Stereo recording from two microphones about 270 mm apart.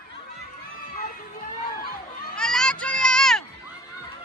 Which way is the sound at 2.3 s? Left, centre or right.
Centre.